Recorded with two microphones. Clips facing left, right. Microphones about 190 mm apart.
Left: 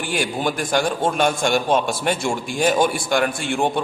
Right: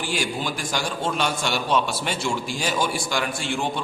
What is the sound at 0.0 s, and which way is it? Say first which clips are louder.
A man's voice: left 4 dB; 55° left (ahead or behind).